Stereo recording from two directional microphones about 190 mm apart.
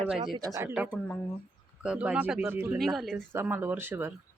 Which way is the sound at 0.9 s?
5° left (ahead or behind).